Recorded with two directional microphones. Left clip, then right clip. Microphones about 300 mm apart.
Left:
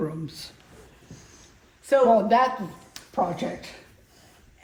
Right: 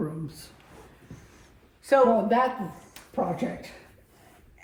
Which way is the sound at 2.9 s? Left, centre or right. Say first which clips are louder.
Left 3 dB; centre.